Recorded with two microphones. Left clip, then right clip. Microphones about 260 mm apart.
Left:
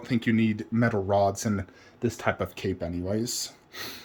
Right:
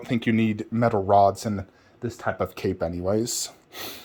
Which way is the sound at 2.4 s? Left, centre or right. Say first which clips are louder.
Right 5 dB; centre.